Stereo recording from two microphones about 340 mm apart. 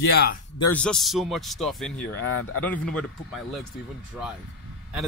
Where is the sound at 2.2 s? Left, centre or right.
Left.